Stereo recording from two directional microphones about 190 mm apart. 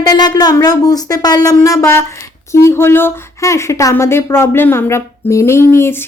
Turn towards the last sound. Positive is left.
turn(degrees=15)  # may be behind; listen again after turning